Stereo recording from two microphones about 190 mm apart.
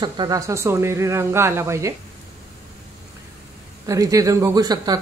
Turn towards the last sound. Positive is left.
turn(degrees=-20)  # may be behind; listen again after turning